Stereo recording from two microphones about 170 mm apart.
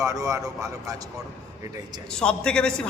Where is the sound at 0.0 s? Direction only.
20° right (ahead or behind).